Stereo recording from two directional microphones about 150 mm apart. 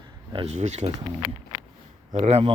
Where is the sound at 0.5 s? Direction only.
50° right (ahead or behind).